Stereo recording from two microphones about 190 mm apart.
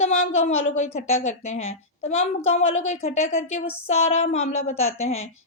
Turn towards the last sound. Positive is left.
turn(degrees=35)  # may be behind; listen again after turning